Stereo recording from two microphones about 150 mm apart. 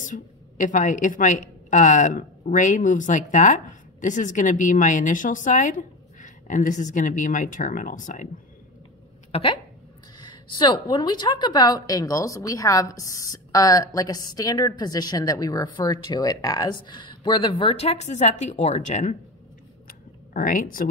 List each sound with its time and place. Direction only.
0.0 s a woman's voice: 60° left (ahead or behind)
9.3 s a woman's voice: 35° left (ahead or behind)
19.9 s a sound: 70° left (ahead or behind)